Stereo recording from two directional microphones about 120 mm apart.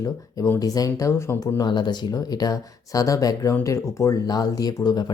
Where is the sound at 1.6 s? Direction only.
40° left (ahead or behind).